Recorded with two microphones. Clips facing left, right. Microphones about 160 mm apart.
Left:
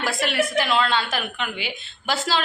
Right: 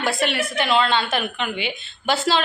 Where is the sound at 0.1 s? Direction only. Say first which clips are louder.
Left 2 dB; centre (ahead or behind).